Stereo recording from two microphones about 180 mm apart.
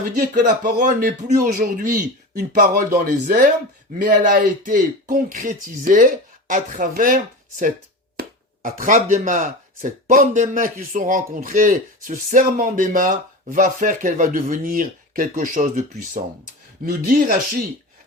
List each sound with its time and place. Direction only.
0.2 s speech: 50° right (ahead or behind)
8.1 s a sound: 65° right (ahead or behind)
8.8 s speech: 45° right (ahead or behind)